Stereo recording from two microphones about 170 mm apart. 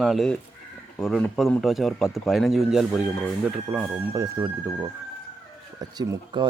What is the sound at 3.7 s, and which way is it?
Speech, 10° right (ahead or behind).